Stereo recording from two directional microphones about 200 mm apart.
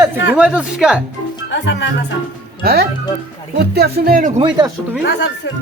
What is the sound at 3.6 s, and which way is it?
Speech, 55° right (ahead or behind).